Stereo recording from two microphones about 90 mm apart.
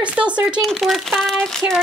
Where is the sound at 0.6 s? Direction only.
Centre (ahead or behind).